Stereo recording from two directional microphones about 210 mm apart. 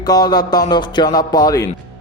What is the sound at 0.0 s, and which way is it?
A man's voice, 20° left (ahead or behind).